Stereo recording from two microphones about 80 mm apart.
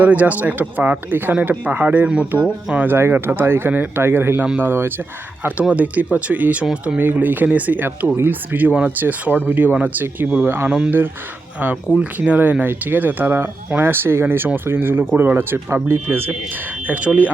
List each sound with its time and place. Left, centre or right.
0.0 s speech: centre
10.7 s speech: centre
11.9 s speech: centre
16.8 s speech: centre